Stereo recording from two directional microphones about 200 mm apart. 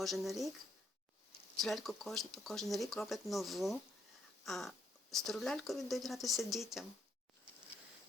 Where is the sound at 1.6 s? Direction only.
Centre (ahead or behind).